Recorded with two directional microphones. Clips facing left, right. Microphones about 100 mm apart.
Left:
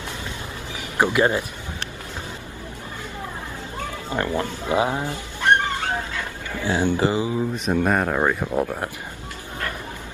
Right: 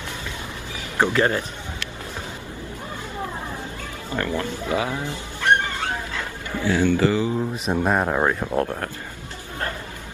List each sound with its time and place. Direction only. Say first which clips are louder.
0.9 s speech: left 1 dB; 15° left (ahead or behind)
4.1 s speech: left 1 dB; 20° left (ahead or behind)
6.6 s speech: right 2 dB; 20° left (ahead or behind)
7.3 s speech: left 1 dB; centre (ahead or behind)
8.5 s speech: even; 15° left (ahead or behind)